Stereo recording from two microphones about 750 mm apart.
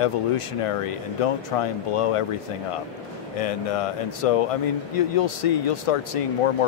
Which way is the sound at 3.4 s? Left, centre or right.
Left.